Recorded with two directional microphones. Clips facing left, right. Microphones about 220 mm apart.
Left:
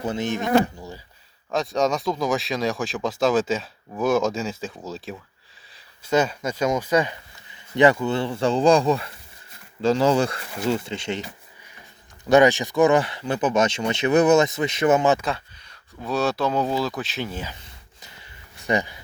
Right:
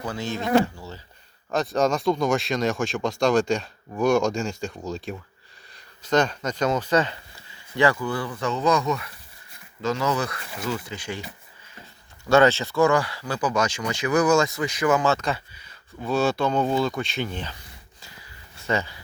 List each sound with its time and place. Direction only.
0.0 s speech: 20° left (ahead or behind)
1.5 s speech: centre (ahead or behind); by 11.3 s 25° left (ahead or behind)
12.3 s speech: 15° left (ahead or behind)
15.2 s speech: 5° right (ahead or behind)
18.0 s a sound: 20° left (ahead or behind)